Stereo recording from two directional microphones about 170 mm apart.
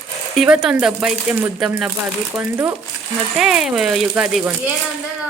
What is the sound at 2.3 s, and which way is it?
Speech, 20° right (ahead or behind).